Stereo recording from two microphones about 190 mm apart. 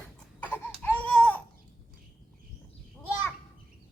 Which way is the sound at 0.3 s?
10° left (ahead or behind).